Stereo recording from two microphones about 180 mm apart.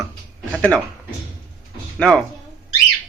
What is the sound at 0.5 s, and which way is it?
Speech, 5° left (ahead or behind).